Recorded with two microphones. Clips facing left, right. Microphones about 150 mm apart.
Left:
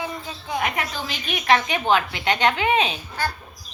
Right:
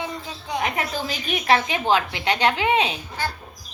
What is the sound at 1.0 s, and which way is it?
A child's voice, 40° right (ahead or behind).